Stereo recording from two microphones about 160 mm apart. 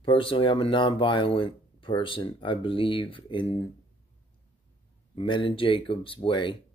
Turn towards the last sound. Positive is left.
turn(degrees=30)  # may be behind; listen again after turning